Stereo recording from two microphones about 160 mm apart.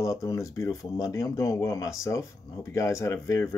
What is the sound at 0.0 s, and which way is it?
Speech, 20° left (ahead or behind).